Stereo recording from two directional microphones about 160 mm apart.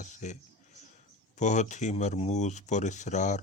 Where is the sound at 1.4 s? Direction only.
50° left (ahead or behind).